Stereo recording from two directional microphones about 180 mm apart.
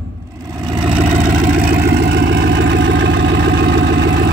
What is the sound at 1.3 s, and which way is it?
Vehicle, 50° right (ahead or behind).